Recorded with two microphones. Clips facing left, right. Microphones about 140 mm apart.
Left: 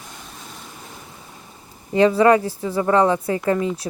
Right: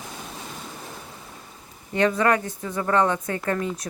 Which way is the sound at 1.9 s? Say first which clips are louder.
Left 6 dB; 30° left (ahead or behind).